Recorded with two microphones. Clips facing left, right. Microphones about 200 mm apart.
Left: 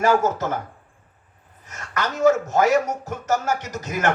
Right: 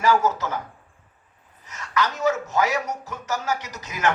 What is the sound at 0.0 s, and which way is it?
Speech, 50° left (ahead or behind).